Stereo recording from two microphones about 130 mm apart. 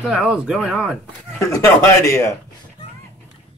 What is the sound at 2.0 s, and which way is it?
Speech, 25° left (ahead or behind).